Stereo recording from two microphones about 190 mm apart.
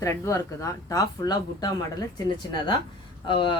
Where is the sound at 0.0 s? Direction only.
15° left (ahead or behind).